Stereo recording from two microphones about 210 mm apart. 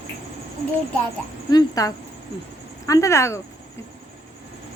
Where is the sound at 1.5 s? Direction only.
20° left (ahead or behind).